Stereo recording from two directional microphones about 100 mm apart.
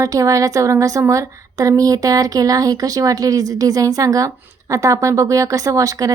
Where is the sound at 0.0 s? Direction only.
35° right (ahead or behind).